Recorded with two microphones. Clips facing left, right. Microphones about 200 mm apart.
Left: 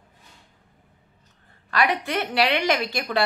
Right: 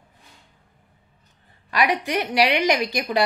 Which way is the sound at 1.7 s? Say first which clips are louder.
Right 1 dB; 15° right (ahead or behind).